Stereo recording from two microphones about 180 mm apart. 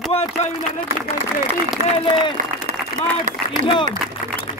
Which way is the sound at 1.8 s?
45° right (ahead or behind).